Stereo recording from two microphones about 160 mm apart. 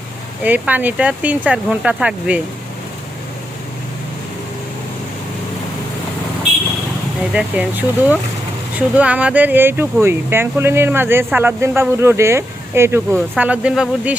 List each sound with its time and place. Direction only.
0.4 s speech: 10° right (ahead or behind)
7.3 s speech: 10° right (ahead or behind)